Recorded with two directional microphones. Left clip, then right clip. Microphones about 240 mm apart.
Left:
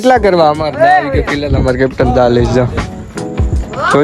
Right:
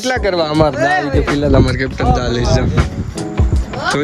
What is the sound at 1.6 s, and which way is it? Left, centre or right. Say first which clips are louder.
Speech: left 5 dB; centre.